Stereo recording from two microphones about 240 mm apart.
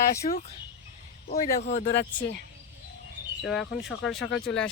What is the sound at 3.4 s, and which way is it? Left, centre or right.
Speech, centre.